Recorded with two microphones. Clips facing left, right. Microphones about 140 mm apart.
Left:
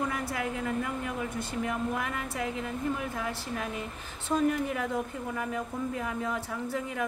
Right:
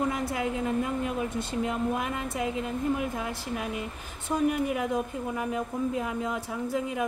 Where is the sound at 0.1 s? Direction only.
20° right (ahead or behind).